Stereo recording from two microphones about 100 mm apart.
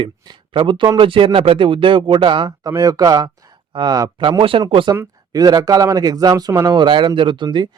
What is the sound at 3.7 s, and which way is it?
Speech, 50° right (ahead or behind).